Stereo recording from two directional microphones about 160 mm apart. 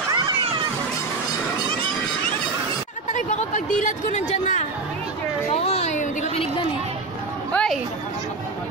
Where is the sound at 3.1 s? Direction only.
50° left (ahead or behind).